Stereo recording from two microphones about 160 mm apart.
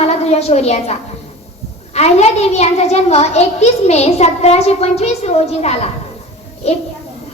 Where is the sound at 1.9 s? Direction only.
40° left (ahead or behind).